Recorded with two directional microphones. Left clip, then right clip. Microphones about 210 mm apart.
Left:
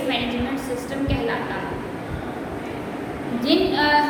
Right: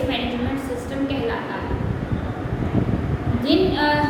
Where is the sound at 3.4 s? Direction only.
Centre (ahead or behind).